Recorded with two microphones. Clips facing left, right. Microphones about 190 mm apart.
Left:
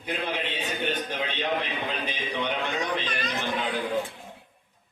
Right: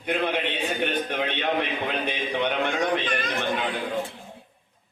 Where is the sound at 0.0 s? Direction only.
60° right (ahead or behind).